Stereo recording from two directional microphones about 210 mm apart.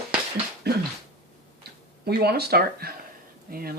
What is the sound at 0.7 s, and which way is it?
Speech, 50° right (ahead or behind).